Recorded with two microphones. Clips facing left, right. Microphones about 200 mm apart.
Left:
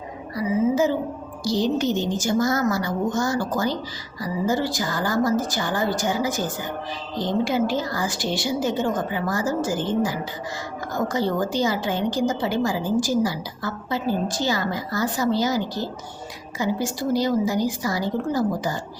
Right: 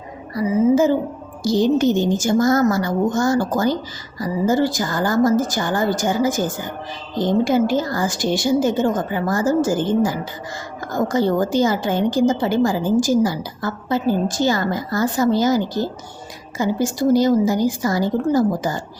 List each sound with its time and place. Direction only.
0.3 s a woman's voice: 50° right (ahead or behind)